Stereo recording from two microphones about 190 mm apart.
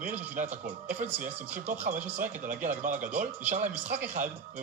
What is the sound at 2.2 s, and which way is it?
A man's voice, 45° right (ahead or behind).